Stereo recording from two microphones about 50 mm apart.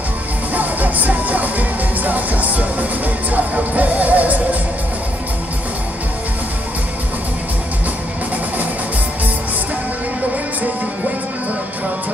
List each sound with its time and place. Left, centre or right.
0.6 s music: right